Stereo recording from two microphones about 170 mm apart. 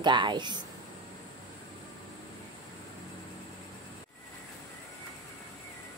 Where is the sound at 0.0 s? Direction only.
25° right (ahead or behind).